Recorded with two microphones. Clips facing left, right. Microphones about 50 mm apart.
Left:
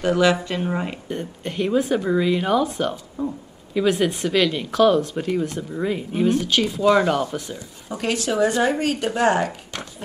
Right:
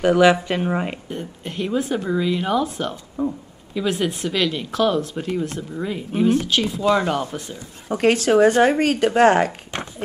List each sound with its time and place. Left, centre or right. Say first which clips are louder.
0.0 s speech: right 4 dB; centre
1.0 s speech: left 2 dB; centre
3.2 s speech: right 3 dB; right
3.8 s speech: left 2 dB; centre
7.9 s speech: right 7 dB; right